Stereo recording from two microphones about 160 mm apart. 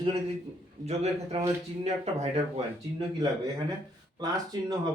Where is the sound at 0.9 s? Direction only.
40° right (ahead or behind).